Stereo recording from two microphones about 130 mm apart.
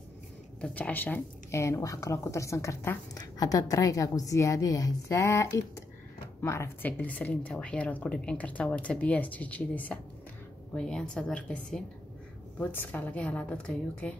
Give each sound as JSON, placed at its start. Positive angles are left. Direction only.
{"t": 0.6, "sound": "a woman's voice", "side_deg": 10}
{"t": 6.9, "sound": "a woman's voice", "side_deg": 10}